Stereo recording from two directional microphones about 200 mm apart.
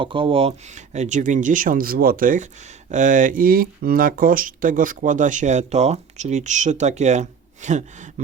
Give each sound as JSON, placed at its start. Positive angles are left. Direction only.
{"t": 0.0, "sound": "speech", "side_deg": -25}